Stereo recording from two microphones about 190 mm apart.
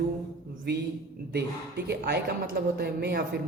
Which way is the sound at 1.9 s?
60° right (ahead or behind).